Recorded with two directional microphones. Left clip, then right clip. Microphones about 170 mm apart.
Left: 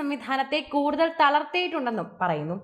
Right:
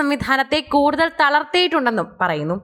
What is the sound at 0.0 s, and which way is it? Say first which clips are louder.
A woman's voice: right 9 dB; 30° right (ahead or behind).